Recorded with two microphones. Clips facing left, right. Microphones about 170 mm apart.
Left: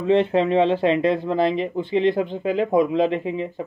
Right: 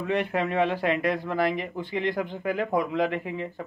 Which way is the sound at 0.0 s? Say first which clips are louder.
Left 8 dB; 25° left (ahead or behind).